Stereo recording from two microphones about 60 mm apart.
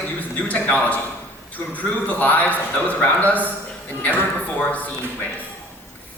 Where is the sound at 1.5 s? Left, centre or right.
Left.